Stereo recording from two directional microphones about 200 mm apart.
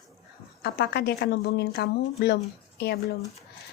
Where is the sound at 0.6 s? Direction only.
55° left (ahead or behind).